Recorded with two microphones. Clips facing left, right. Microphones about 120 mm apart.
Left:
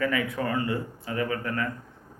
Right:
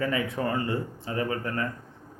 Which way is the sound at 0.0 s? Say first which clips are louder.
Even; 30° right (ahead or behind).